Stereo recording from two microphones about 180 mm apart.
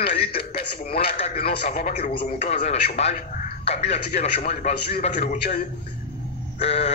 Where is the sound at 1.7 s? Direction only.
50° left (ahead or behind).